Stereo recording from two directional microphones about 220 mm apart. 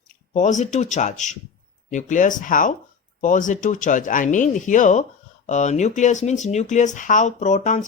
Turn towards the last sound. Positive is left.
turn(degrees=35)  # may be behind; listen again after turning